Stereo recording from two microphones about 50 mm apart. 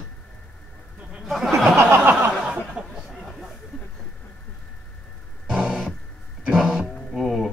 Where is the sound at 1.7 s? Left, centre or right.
Right.